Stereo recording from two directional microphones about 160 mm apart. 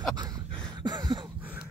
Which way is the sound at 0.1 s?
25° right (ahead or behind).